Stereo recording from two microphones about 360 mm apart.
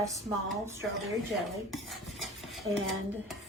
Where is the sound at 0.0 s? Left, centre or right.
Centre.